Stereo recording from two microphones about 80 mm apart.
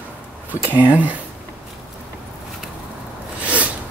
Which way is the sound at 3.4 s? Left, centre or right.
Centre.